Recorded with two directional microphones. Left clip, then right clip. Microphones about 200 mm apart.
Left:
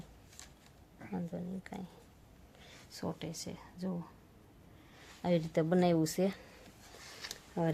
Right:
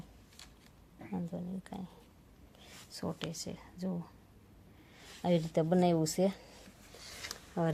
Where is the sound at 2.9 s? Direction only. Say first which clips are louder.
Right 1 dB; centre (ahead or behind).